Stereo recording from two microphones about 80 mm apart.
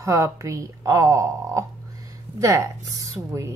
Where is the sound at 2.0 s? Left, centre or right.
Right.